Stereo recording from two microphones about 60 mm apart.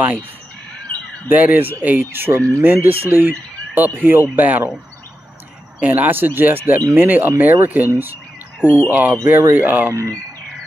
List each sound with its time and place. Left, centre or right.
1.3 s speech: right
5.8 s speech: right